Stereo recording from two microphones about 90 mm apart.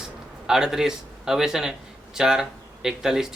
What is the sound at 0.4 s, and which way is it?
Speech, 5° right (ahead or behind).